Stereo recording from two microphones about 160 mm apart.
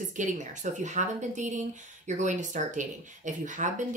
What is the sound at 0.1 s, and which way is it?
Speech, 50° right (ahead or behind).